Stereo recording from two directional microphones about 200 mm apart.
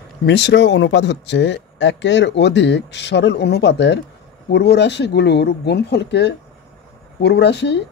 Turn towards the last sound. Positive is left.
turn(degrees=60)  # may be behind; listen again after turning